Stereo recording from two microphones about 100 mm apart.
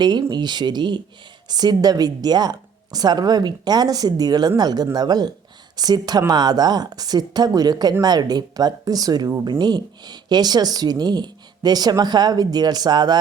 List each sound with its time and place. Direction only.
0.0 s speech: 45° right (ahead or behind)